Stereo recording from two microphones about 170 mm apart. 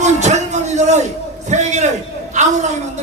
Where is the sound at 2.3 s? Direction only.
45° right (ahead or behind).